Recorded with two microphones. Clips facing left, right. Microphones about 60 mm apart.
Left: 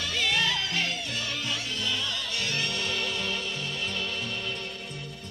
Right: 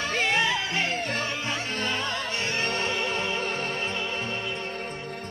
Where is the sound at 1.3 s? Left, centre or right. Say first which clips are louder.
Right 3 dB; right.